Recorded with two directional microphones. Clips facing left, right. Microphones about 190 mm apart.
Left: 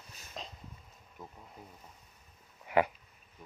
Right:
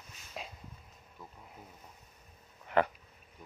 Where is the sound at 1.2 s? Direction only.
20° left (ahead or behind).